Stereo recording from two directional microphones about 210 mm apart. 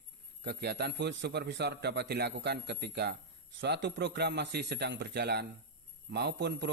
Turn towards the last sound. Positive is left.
turn(degrees=-55)  # may be behind; listen again after turning